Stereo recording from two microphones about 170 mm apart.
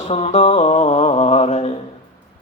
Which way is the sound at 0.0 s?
40° left (ahead or behind).